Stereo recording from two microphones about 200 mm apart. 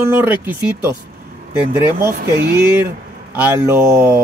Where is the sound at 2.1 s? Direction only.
50° right (ahead or behind).